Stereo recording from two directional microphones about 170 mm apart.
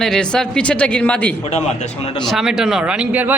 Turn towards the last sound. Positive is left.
turn(degrees=-10)  # may be behind; listen again after turning